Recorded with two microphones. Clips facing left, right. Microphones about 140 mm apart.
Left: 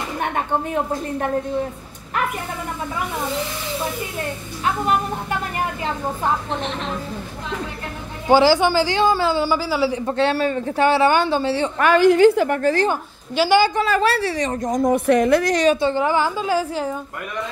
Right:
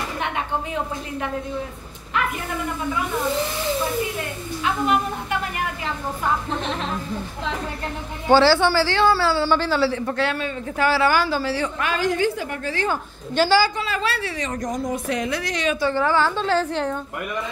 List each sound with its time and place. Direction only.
0.2 s speech: 45° left (ahead or behind)
8.3 s a man's voice: 15° left (ahead or behind)
11.8 s a woman's voice: 70° left (ahead or behind)
12.4 s a woman's voice: 45° left (ahead or behind)
13.3 s a man's voice: 10° left (ahead or behind)
13.7 s a woman's voice: 45° left (ahead or behind)
14.8 s a woman's voice: 50° left (ahead or behind)
15.8 s a man's voice: 15° left (ahead or behind)